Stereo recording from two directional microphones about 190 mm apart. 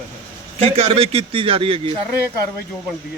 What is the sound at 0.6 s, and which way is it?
A man's voice, 30° right (ahead or behind).